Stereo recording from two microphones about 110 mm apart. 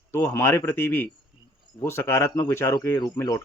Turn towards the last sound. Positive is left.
turn(degrees=25)  # may be behind; listen again after turning